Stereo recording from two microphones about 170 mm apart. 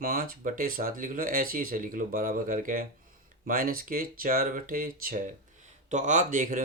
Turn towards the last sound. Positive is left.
turn(degrees=-50)  # may be behind; listen again after turning